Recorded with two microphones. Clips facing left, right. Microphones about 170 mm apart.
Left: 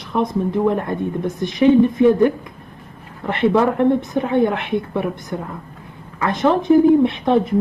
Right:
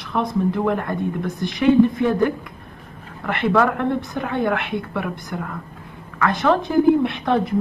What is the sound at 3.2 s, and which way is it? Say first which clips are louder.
A woman's voice: left 3 dB; 20° left (ahead or behind).